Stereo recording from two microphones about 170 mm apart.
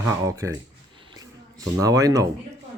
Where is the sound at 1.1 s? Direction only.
20° right (ahead or behind).